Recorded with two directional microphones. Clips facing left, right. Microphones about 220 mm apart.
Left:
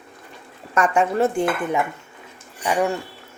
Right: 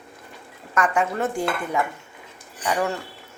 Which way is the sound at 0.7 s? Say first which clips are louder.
Left 4 dB; 25° left (ahead or behind).